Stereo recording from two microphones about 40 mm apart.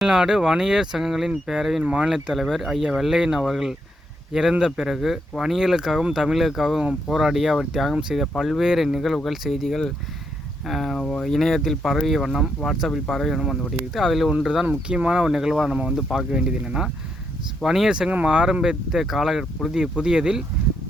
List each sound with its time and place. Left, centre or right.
0.0 s speech: centre
1.8 s speech: right
2.0 s speech: centre
3.0 s speech: centre
12.9 s speech: centre
14.4 s speech: centre
15.4 s speech: centre
16.1 s speech: right
17.6 s speech: centre
18.3 s speech: right